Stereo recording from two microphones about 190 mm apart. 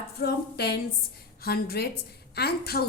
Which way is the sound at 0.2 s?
60° left (ahead or behind).